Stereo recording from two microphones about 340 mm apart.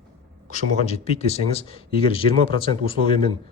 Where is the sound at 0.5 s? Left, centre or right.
Centre.